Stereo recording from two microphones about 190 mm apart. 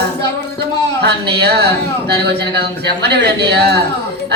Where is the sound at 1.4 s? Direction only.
60° right (ahead or behind).